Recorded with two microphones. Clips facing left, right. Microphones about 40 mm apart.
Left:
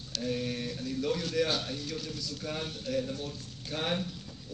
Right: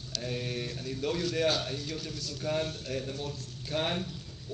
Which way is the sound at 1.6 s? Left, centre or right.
Right.